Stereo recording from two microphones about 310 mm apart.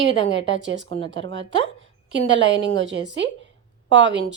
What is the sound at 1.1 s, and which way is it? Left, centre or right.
Speech, right.